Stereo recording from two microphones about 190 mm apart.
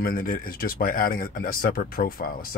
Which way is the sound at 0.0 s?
50° left (ahead or behind).